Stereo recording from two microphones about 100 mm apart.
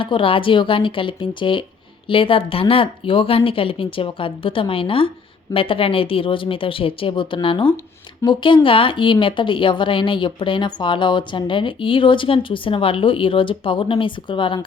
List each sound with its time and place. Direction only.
0.0 s speech: 60° left (ahead or behind)